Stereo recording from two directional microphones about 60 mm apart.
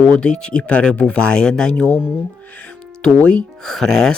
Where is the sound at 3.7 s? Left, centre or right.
Centre.